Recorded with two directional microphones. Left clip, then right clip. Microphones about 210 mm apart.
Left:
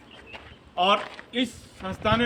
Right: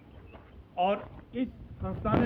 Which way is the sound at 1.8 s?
35° left (ahead or behind).